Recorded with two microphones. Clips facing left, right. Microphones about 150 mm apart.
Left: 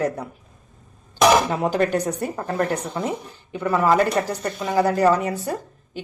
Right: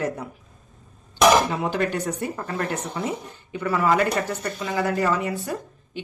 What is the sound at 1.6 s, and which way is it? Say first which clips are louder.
A woman's voice: left 4 dB; 40° left (ahead or behind).